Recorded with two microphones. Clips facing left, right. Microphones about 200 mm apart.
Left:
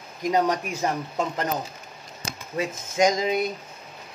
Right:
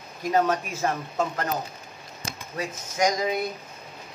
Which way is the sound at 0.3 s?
15° left (ahead or behind).